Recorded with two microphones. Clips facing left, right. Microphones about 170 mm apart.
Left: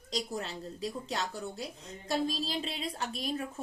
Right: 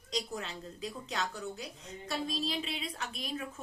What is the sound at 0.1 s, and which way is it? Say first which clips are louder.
A woman's voice: left 2 dB; 35° left (ahead or behind).